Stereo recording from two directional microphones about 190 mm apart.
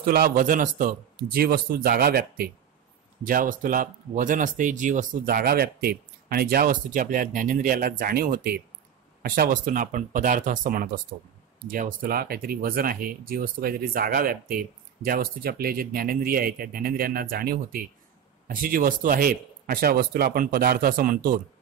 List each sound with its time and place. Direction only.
0.0 s speech: 50° right (ahead or behind)